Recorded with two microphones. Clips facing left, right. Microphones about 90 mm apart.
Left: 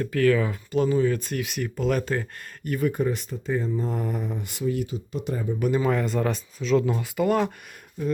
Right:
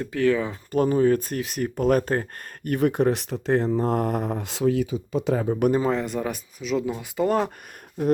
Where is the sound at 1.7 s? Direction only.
50° right (ahead or behind); by 5.7 s 75° right (ahead or behind).